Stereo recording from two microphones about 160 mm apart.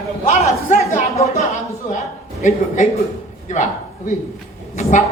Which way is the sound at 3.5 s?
50° left (ahead or behind).